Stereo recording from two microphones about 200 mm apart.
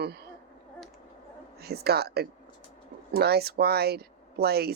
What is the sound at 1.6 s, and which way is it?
Speech, 50° right (ahead or behind).